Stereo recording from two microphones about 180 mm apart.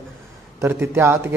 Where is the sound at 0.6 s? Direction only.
15° right (ahead or behind).